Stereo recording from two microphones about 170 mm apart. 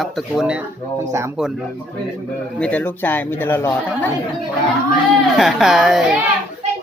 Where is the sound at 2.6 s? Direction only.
10° left (ahead or behind).